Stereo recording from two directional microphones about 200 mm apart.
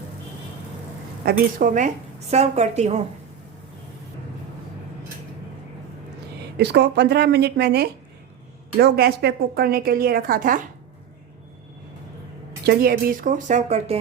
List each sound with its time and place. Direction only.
1.2 s a woman's voice: 45° right (ahead or behind)
6.6 s a woman's voice: 55° right (ahead or behind)
12.6 s a woman's voice: 50° right (ahead or behind); by 14.0 s 30° right (ahead or behind)